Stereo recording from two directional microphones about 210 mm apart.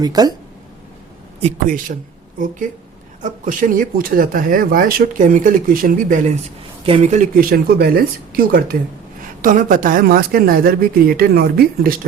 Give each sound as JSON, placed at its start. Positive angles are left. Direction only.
{"t": 0.0, "sound": "speech", "side_deg": -20}
{"t": 1.4, "sound": "speech", "side_deg": -35}
{"t": 3.2, "sound": "speech", "side_deg": -40}